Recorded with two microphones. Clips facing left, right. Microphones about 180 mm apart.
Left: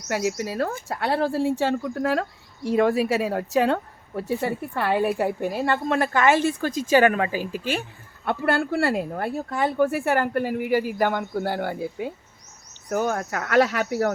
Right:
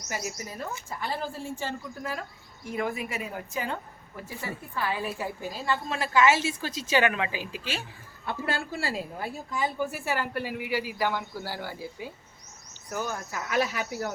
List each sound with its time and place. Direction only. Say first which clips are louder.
0.1 s speech: left 10 dB; 75° left (ahead or behind)
4.3 s a woman's voice: left 12 dB; 65° left (ahead or behind)